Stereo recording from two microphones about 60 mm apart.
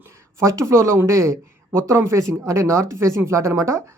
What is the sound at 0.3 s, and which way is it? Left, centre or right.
Speech, right.